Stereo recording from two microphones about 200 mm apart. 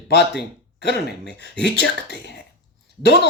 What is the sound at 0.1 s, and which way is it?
Speech, 55° left (ahead or behind).